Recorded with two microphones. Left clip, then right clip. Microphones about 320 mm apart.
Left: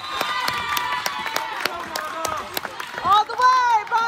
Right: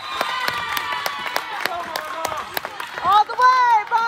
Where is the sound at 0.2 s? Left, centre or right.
Right.